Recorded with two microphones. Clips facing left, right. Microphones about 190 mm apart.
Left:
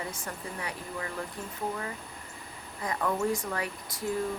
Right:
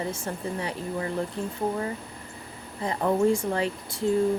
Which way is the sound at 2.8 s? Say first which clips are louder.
Right 6 dB; 30° right (ahead or behind).